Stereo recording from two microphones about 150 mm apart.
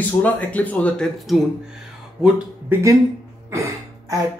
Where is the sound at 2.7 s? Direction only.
15° right (ahead or behind).